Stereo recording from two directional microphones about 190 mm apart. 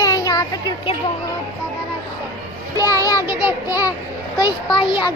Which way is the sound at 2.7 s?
15° left (ahead or behind).